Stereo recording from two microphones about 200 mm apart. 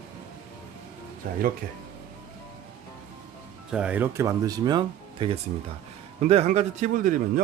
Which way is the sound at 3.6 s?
5° right (ahead or behind).